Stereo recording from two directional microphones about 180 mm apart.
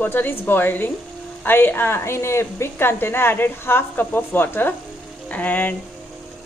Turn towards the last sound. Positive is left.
turn(degrees=10)  # may be behind; listen again after turning